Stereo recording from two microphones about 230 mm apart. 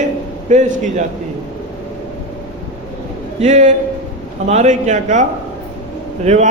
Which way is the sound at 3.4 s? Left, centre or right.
Right.